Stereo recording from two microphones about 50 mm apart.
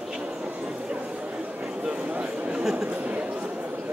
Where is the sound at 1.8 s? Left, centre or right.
Centre.